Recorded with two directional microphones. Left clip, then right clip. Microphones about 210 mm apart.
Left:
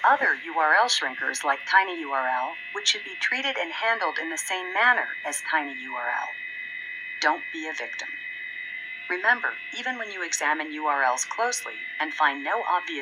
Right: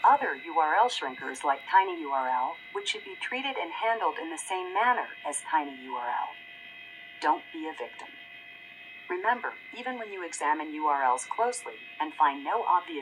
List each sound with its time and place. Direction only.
0.0 s speech: 25° left (ahead or behind)
2.8 s speech: 10° left (ahead or behind)
3.8 s speech: 25° left (ahead or behind)
9.0 s speech: 30° left (ahead or behind)
10.9 s speech: 25° left (ahead or behind)